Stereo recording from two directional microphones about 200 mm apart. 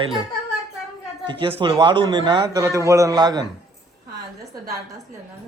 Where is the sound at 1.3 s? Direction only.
25° right (ahead or behind).